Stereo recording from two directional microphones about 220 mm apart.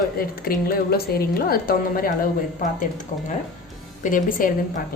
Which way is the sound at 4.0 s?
35° left (ahead or behind).